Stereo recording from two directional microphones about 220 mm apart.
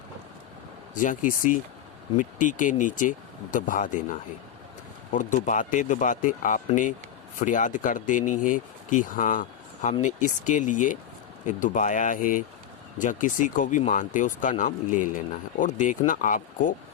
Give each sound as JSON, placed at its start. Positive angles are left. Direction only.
{"t": 0.9, "sound": "speech", "side_deg": 35}